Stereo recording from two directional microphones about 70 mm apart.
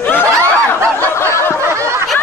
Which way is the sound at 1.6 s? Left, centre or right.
Right.